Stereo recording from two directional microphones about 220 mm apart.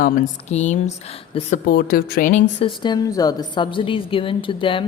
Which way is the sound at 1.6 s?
40° left (ahead or behind).